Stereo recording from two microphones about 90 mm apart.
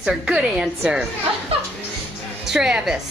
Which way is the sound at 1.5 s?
90° right.